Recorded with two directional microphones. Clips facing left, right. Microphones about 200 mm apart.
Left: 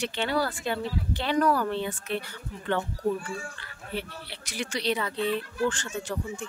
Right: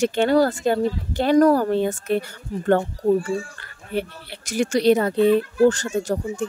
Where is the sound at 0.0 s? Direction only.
45° right (ahead or behind).